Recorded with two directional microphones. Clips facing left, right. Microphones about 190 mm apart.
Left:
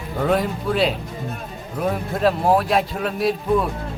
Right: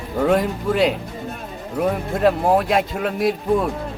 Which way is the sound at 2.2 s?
15° right (ahead or behind).